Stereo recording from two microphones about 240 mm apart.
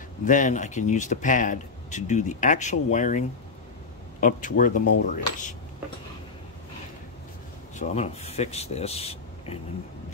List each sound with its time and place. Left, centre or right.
0.2 s speech: left
7.7 s speech: left